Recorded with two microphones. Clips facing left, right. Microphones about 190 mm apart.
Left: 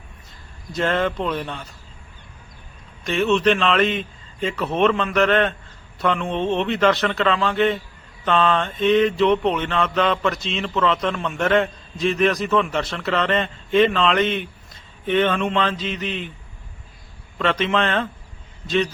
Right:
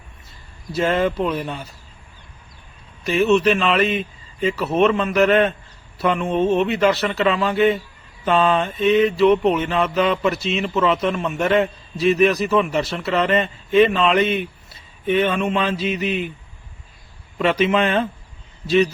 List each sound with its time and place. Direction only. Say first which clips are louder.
0.7 s mantra: right 2 dB; 10° right (ahead or behind)
3.0 s mantra: right 3 dB; 5° right (ahead or behind)
17.3 s mantra: right 3 dB; 10° right (ahead or behind)